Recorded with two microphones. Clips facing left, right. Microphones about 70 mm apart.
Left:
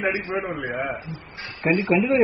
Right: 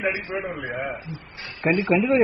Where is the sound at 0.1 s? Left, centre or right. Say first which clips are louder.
Left 2 dB; left.